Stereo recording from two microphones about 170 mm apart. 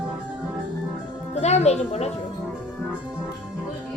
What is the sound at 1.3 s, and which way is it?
Music, 40° left (ahead or behind).